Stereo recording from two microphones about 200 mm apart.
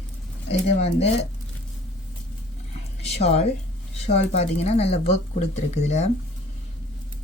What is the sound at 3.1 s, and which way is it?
Speech, 30° left (ahead or behind).